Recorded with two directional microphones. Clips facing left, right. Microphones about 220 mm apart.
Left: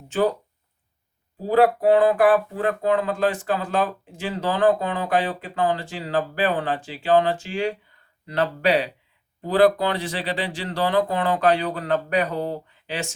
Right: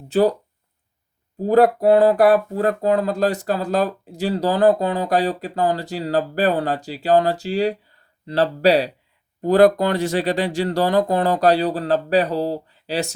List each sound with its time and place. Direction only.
0.1 s speech: 35° right (ahead or behind)
1.4 s speech: 45° right (ahead or behind)